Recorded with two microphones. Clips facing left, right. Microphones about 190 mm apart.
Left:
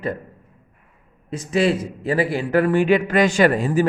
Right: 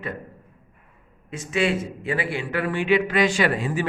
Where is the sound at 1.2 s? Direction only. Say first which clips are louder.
Left 4 dB; 35° left (ahead or behind).